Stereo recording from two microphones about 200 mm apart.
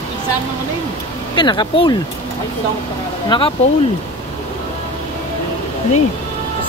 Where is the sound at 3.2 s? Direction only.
25° left (ahead or behind).